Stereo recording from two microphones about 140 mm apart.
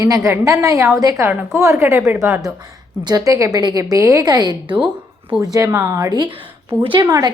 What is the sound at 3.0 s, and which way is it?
A woman's voice, 30° right (ahead or behind).